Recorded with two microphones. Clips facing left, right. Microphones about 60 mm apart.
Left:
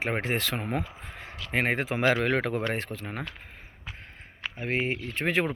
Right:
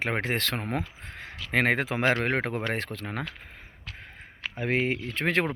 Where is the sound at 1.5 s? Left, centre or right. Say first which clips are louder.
Right 2 dB; right.